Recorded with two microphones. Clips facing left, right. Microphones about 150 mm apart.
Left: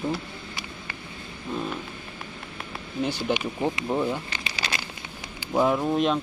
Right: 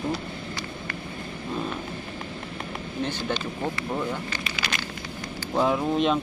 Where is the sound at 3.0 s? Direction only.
10° left (ahead or behind).